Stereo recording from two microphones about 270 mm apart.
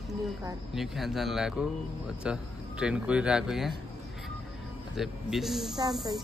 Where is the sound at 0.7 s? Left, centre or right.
Centre.